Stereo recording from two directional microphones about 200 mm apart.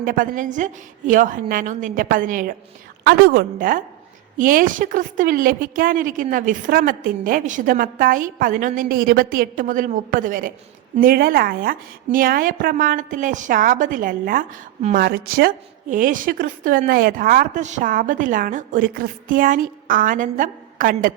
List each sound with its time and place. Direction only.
0.0 s a woman's voice: 45° right (ahead or behind)
3.0 s a woman's voice: 50° right (ahead or behind)
14.9 s a woman's voice: 50° right (ahead or behind)